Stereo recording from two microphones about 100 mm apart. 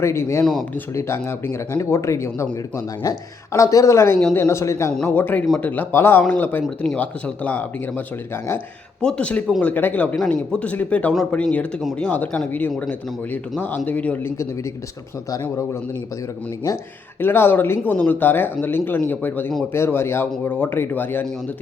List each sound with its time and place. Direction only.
0.0 s a man's voice: 25° left (ahead or behind)
5.0 s speech: 20° left (ahead or behind)
17.2 s speech: 20° left (ahead or behind)